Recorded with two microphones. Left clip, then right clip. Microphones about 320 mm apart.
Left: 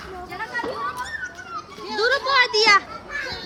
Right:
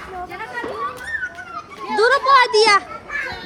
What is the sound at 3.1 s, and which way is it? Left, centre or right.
Children playing, centre.